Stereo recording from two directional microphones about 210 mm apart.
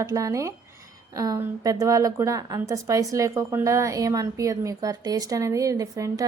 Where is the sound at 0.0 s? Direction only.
15° right (ahead or behind).